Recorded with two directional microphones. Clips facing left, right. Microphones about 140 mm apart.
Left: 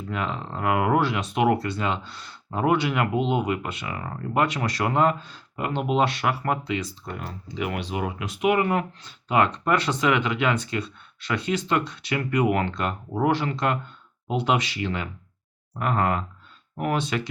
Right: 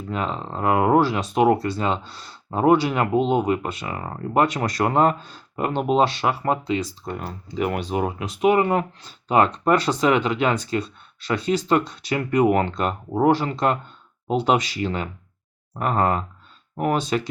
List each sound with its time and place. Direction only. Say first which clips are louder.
0.1 s speech: right 3 dB; 35° right (ahead or behind)